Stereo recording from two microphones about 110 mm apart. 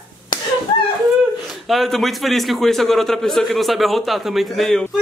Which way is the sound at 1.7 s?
Centre (ahead or behind).